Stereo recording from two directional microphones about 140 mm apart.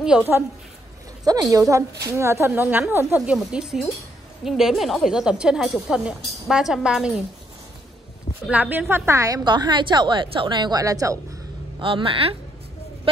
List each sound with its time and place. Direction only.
1.2 s a woman's voice: 25° right (ahead or behind)
3.2 s a woman's voice: 5° right (ahead or behind)
8.5 s a woman's voice: 10° right (ahead or behind)
11.8 s speech: 40° right (ahead or behind)